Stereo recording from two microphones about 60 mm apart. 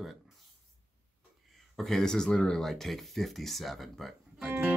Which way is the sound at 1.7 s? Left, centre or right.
Centre.